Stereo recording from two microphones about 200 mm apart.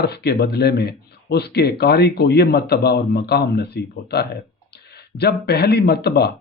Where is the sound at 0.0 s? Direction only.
55° left (ahead or behind).